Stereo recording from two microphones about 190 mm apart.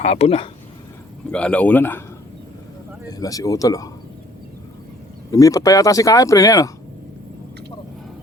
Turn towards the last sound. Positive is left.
turn(degrees=15)  # may be behind; listen again after turning